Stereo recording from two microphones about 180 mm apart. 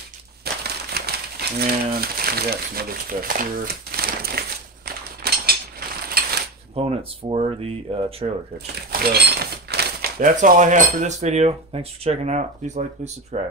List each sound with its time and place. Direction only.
0.7 s crumpling: 60° right (ahead or behind)
6.7 s speech: 30° right (ahead or behind)
8.9 s speech: 60° right (ahead or behind); by 13.4 s 40° right (ahead or behind)